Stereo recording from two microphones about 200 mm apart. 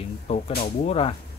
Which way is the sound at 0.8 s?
30° left (ahead or behind).